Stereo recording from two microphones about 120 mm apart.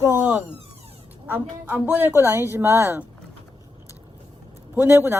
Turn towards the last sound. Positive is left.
turn(degrees=-20)  # may be behind; listen again after turning